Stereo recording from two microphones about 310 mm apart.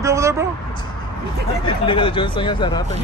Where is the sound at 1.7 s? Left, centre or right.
Centre.